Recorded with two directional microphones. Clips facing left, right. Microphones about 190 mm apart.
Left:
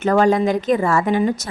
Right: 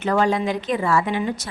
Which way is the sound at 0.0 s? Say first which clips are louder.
Left 5 dB; 45° left (ahead or behind).